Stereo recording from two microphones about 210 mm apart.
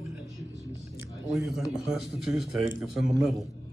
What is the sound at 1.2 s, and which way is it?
A man's voice, centre (ahead or behind).